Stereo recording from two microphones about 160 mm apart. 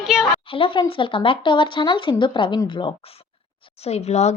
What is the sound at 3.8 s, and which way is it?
Speech, 40° left (ahead or behind).